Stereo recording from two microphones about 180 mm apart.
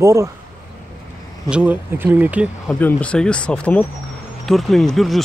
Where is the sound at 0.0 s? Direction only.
15° right (ahead or behind).